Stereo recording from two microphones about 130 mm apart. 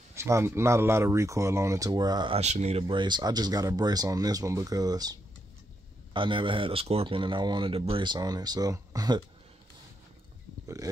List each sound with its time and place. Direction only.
0.1 s speech: 20° right (ahead or behind)
2.3 s speech: 55° right (ahead or behind)
2.9 s speech: 35° right (ahead or behind)
6.1 s speech: 40° right (ahead or behind)